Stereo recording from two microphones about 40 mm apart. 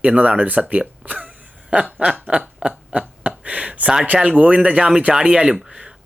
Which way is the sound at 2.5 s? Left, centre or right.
Right.